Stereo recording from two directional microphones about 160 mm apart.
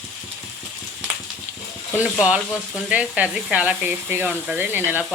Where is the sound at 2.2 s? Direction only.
5° right (ahead or behind).